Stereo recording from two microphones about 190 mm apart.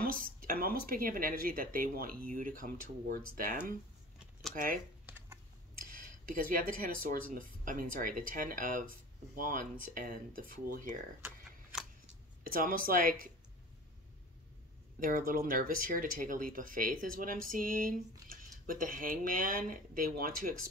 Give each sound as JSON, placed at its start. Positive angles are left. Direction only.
{"t": 0.0, "sound": "speech", "side_deg": -50}
{"t": 5.0, "sound": "computer keyboard", "side_deg": -10}
{"t": 5.9, "sound": "speech", "side_deg": -45}
{"t": 12.4, "sound": "speech", "side_deg": -50}
{"t": 15.0, "sound": "speech", "side_deg": -50}